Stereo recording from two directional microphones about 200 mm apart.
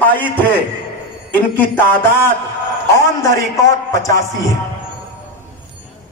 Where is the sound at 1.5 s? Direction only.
10° left (ahead or behind).